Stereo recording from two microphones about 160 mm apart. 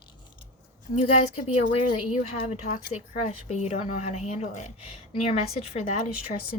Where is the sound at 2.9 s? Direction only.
45° left (ahead or behind).